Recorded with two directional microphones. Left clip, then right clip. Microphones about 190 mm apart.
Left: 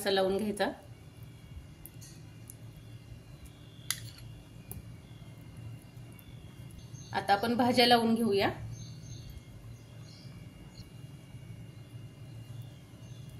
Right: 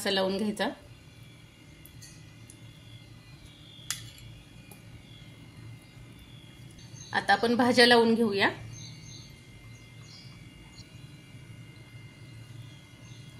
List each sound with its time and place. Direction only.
0.0 s a woman's voice: 15° right (ahead or behind)
7.1 s a woman's voice: 20° right (ahead or behind)